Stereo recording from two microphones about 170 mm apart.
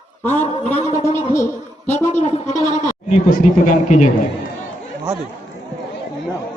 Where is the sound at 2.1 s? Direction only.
45° left (ahead or behind).